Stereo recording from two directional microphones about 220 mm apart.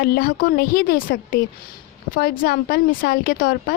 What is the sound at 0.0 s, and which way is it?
A woman's voice, 40° left (ahead or behind).